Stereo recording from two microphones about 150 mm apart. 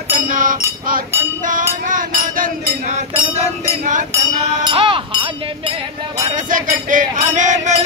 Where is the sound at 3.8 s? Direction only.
55° right (ahead or behind).